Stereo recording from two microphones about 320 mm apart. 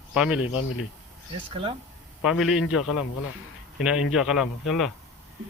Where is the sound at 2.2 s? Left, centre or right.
Centre.